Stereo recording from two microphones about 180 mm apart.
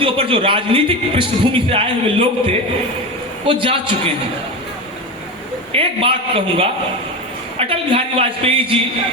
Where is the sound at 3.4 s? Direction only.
30° right (ahead or behind).